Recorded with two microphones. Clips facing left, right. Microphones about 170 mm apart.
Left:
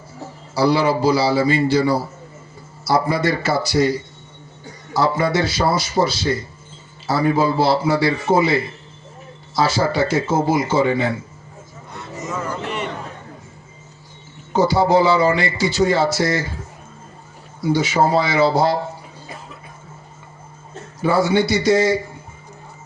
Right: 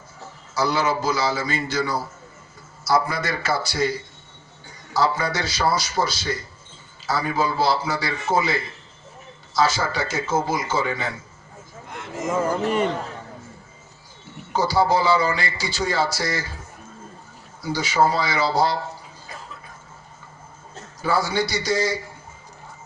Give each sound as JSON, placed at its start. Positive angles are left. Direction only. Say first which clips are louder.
{"t": 0.5, "sound": "a man's voice", "louder": "left 6 dB", "side_deg": 30}
{"t": 4.9, "sound": "speech", "louder": "left 5 dB", "side_deg": 25}
{"t": 12.2, "sound": "speech", "louder": "right 5 dB", "side_deg": -50}
{"t": 14.5, "sound": "speech", "louder": "left 5 dB", "side_deg": 25}
{"t": 17.6, "sound": "speech", "louder": "left 4 dB", "side_deg": 25}
{"t": 21.0, "sound": "speech", "louder": "left 6 dB", "side_deg": 25}